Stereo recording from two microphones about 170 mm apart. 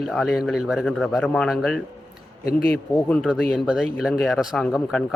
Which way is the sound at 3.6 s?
5° right (ahead or behind).